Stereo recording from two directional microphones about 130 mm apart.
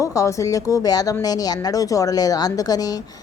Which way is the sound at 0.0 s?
25° left (ahead or behind).